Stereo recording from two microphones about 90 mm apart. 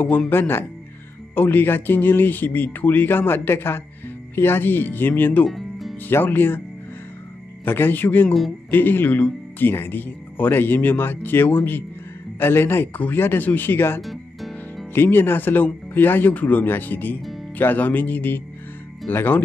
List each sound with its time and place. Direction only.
0.3 s speech: 25° left (ahead or behind)
5.5 s music: centre (ahead or behind)
6.0 s speech: 20° left (ahead or behind)
7.6 s speech: 25° left (ahead or behind)
8.3 s speech: centre (ahead or behind)
8.6 s speech: 25° left (ahead or behind)
14.0 s music: centre (ahead or behind)
15.0 s speech: 25° left (ahead or behind)